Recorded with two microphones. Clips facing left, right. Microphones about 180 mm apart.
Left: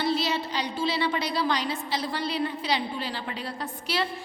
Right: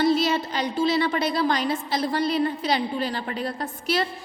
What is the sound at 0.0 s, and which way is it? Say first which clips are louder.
A woman's voice: right 6 dB; 45° right (ahead or behind).